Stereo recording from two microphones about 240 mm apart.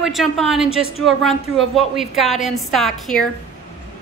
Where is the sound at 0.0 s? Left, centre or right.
Centre.